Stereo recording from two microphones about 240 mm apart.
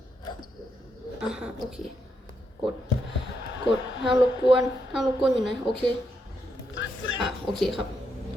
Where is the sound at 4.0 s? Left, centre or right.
Right.